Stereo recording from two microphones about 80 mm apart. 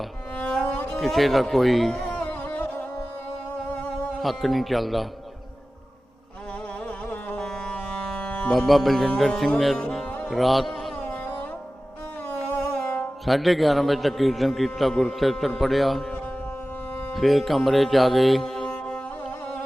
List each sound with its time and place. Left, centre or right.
0.3 s music: centre
0.9 s a man's voice: centre
2.1 s music: centre
4.2 s a man's voice: centre
7.3 s music: centre
8.5 s a man's voice: centre
10.2 s music: centre
11.0 s music: centre
13.2 s a man's voice: centre
17.2 s music: centre